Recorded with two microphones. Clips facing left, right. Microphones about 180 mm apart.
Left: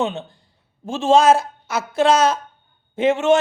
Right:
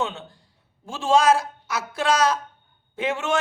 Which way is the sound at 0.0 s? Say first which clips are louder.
Left 5 dB; 20° left (ahead or behind).